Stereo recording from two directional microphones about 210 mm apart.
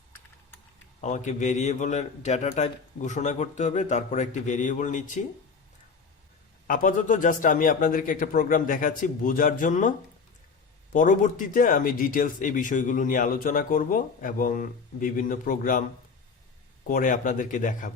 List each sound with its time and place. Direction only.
1.0 s a man's voice: 35° left (ahead or behind)
6.7 s a man's voice: 40° left (ahead or behind)
10.9 s a man's voice: 40° left (ahead or behind)
16.9 s a man's voice: 40° left (ahead or behind)